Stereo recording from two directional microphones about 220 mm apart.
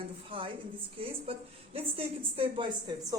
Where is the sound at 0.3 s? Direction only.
25° right (ahead or behind).